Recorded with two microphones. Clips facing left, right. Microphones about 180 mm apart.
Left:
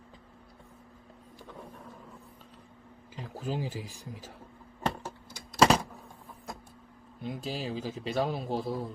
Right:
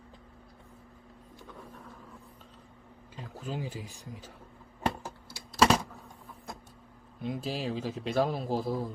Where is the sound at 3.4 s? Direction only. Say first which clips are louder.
Left 3 dB; 30° left (ahead or behind).